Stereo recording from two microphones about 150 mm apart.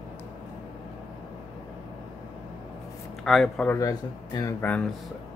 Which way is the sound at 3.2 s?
5° left (ahead or behind).